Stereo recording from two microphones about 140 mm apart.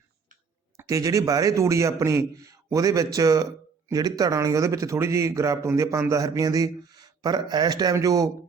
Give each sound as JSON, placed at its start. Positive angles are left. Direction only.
{"t": 0.8, "sound": "a man's voice", "side_deg": -25}